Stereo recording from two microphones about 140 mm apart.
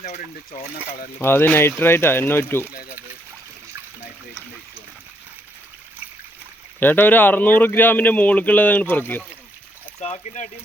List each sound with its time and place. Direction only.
1.2 s speech: 15° left (ahead or behind)
6.7 s speech: 15° left (ahead or behind)
10.0 s speech: 55° left (ahead or behind)